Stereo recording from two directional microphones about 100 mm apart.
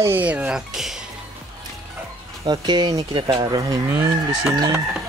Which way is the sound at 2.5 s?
45° right (ahead or behind).